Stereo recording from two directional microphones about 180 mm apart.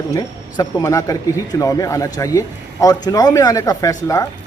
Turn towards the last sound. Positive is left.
turn(degrees=20)  # may be behind; listen again after turning